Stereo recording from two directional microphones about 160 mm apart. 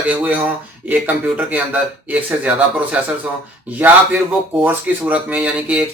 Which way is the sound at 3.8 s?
10° right (ahead or behind).